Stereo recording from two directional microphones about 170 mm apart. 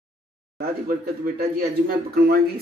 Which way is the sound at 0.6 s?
55° right (ahead or behind).